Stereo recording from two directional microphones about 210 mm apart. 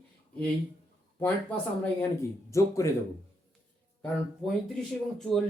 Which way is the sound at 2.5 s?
15° left (ahead or behind).